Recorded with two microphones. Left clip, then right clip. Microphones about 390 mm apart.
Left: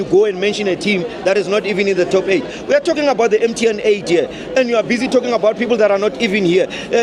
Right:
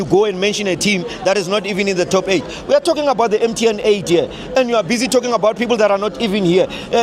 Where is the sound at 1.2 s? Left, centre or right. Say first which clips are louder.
Left 1 dB; centre.